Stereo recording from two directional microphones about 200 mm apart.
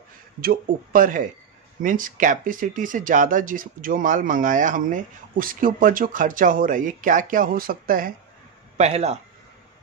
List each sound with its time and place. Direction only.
0.4 s speech: 45° right (ahead or behind)
8.7 s speech: 30° right (ahead or behind)